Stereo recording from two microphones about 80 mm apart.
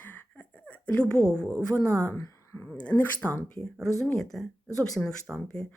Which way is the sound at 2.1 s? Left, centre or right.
Left.